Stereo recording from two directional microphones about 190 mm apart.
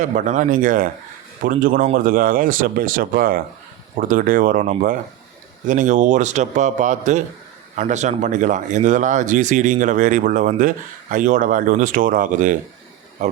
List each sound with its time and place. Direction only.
0.0 s speech: 45° right (ahead or behind)